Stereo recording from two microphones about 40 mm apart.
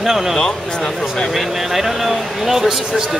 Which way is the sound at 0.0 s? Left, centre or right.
Centre.